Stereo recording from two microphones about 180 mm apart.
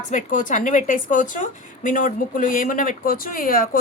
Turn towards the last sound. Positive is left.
turn(degrees=50)  # may be behind; listen again after turning